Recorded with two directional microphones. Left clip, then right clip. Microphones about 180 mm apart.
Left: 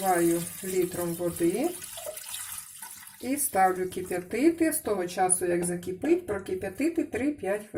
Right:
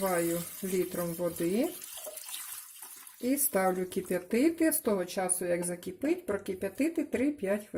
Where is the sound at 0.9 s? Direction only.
55° right (ahead or behind).